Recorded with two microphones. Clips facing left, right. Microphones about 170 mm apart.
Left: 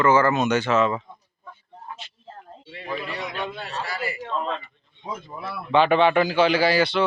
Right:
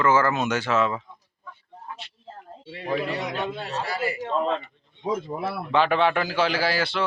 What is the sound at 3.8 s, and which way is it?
Speech, 25° right (ahead or behind).